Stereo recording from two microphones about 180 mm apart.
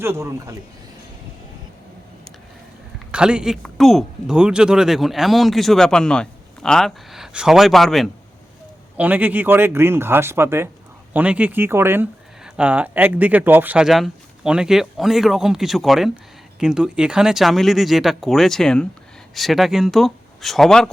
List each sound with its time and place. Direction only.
0.0 s speech: 15° right (ahead or behind)
3.1 s speech: 5° right (ahead or behind)